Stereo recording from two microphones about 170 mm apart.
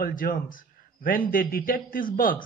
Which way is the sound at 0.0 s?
55° left (ahead or behind).